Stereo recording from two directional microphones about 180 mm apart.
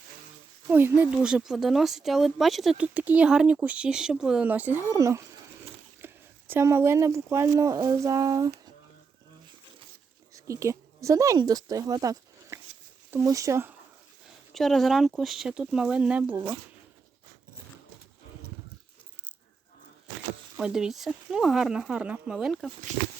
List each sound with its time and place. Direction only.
0.7 s speech: 10° right (ahead or behind)
6.0 s a sound: 15° right (ahead or behind)
6.5 s speech: 15° right (ahead or behind)
10.3 s speech: 15° right (ahead or behind)
14.5 s speech: centre (ahead or behind)
20.6 s speech: 5° right (ahead or behind)
22.9 s speech: 40° right (ahead or behind)